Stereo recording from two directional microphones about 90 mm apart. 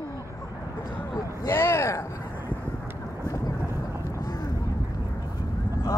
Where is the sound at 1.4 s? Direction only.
30° left (ahead or behind).